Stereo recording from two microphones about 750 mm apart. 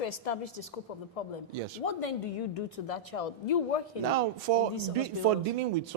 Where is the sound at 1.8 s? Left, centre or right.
Left.